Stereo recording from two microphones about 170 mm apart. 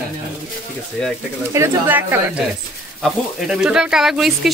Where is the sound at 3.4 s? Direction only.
5° right (ahead or behind).